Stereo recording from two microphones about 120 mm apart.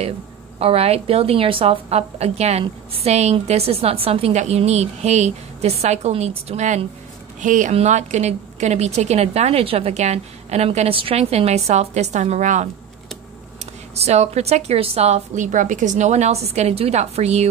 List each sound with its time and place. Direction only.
0.6 s a woman's voice: 55° right (ahead or behind); by 6.8 s 75° right (ahead or behind)
7.3 s a woman's voice: 90° right
14.0 s a woman's voice: 65° right (ahead or behind)